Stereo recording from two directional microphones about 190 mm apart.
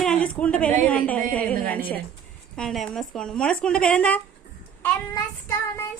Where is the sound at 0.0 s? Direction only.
5° left (ahead or behind).